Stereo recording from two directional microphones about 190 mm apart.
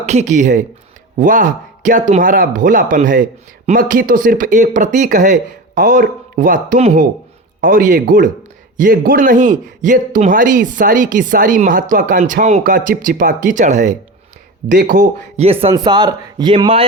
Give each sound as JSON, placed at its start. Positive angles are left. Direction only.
{"t": 0.0, "sound": "speech", "side_deg": -35}
{"t": 15.7, "sound": "a man's voice", "side_deg": -20}